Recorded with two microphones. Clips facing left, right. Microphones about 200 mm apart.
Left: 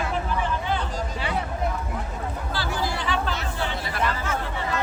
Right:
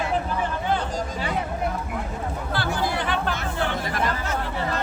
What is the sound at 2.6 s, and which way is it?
Chatter, 55° right (ahead or behind).